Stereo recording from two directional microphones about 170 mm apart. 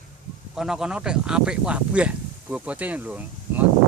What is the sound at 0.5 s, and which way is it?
Speech, 5° right (ahead or behind).